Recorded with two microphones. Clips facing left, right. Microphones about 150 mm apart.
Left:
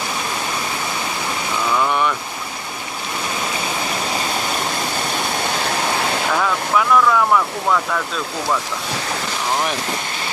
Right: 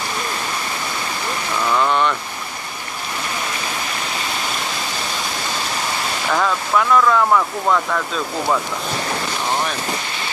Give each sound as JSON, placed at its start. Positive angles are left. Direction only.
{"t": 1.8, "sound": "vehicle", "side_deg": 10}
{"t": 6.3, "sound": "speech", "side_deg": 0}